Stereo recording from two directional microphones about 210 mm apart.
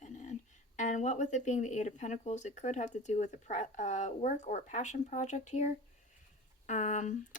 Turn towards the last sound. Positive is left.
turn(degrees=35)  # may be behind; listen again after turning